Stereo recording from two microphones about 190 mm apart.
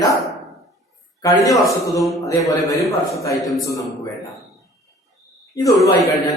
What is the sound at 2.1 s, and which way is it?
Speech, 15° left (ahead or behind).